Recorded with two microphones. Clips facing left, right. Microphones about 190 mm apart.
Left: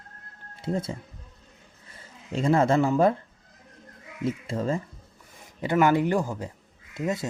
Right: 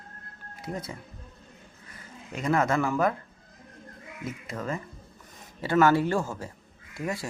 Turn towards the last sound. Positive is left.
turn(degrees=20)  # may be behind; listen again after turning